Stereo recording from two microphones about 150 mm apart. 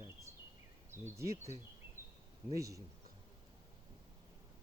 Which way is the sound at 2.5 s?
20° right (ahead or behind).